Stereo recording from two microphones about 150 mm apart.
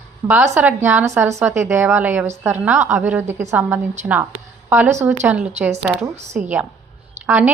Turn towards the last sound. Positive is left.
turn(degrees=-10)  # may be behind; listen again after turning